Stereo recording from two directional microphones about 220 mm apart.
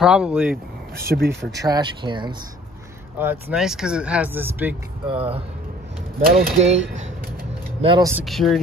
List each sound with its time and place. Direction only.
0.0 s speech: 5° right (ahead or behind)
1.1 s speech: 50° right (ahead or behind)
1.6 s speech: 20° right (ahead or behind)
3.2 s speech: 10° right (ahead or behind)
5.0 s speech: 25° right (ahead or behind)
8.3 s speech: centre (ahead or behind)